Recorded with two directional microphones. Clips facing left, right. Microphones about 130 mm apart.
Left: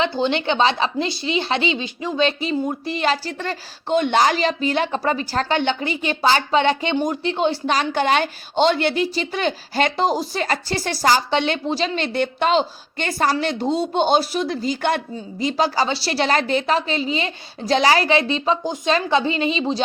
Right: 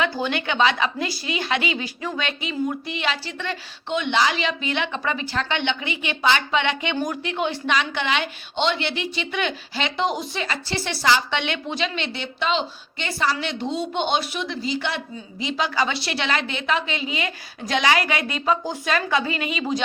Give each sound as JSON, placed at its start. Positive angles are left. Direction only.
{"t": 0.0, "sound": "speech", "side_deg": 25}
{"t": 6.9, "sound": "speech", "side_deg": 25}